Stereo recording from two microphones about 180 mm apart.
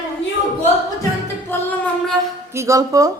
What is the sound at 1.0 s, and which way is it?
Music, 15° left (ahead or behind).